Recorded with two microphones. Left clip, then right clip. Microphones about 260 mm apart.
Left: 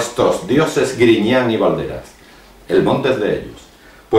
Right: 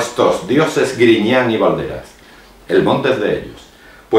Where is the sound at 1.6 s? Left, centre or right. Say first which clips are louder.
Right 1 dB; right.